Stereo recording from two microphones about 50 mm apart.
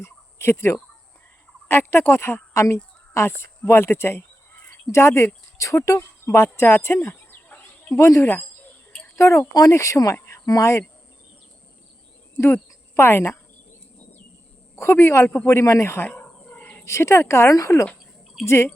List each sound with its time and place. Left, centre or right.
0.0 s turkey: left
1.7 s speech: left
3.2 s speech: left
4.9 s speech: left
7.3 s chicken: left
7.9 s speech: left
9.1 s speech: left
13.0 s speech: left
14.8 s speech: left
15.4 s speech: left
16.0 s dog: left
16.8 s speech: left
18.4 s speech: left